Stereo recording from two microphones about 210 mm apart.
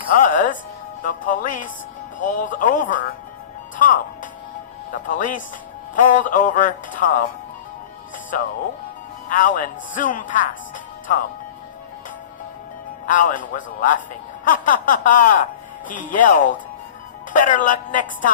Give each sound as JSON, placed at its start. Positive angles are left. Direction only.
{"t": 0.1, "sound": "speech", "side_deg": 40}
{"t": 1.0, "sound": "music", "side_deg": 40}
{"t": 9.3, "sound": "music", "side_deg": 40}
{"t": 13.1, "sound": "music", "side_deg": 40}